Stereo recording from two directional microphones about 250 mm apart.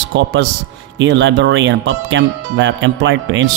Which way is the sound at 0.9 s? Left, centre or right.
Right.